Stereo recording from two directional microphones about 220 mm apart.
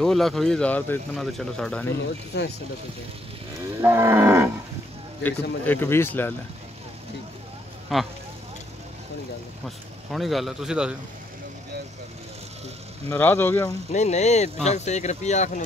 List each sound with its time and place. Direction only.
0.0 s speech: centre (ahead or behind)
2.3 s speech: 50° left (ahead or behind)
3.8 s cattle: 10° right (ahead or behind)
5.2 s speech: 10° left (ahead or behind)
7.9 s speech: centre (ahead or behind)
10.1 s speech: centre (ahead or behind)
13.1 s speech: 10° left (ahead or behind)
13.9 s speech: 30° left (ahead or behind)